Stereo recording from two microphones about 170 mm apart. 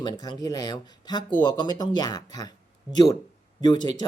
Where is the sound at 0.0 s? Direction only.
25° left (ahead or behind).